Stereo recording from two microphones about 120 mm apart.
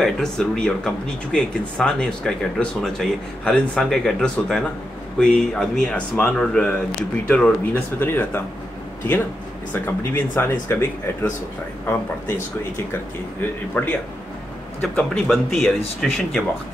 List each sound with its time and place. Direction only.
0.0 s speech: 5° left (ahead or behind)
9.7 s speech: 15° left (ahead or behind)
13.4 s speech: 15° left (ahead or behind)
14.8 s speech: 5° left (ahead or behind)